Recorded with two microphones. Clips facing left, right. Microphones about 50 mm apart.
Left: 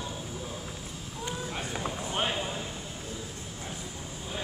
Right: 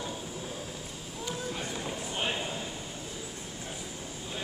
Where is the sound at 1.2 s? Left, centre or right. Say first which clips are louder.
Even; left.